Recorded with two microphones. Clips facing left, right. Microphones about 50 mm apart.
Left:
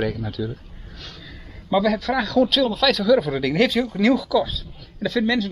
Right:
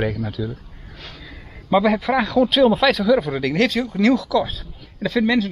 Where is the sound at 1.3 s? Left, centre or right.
Centre.